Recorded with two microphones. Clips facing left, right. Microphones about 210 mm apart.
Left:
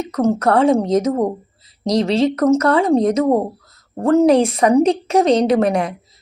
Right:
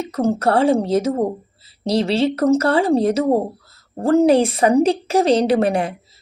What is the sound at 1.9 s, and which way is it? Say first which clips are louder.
Speech: left 2 dB; 30° right (ahead or behind).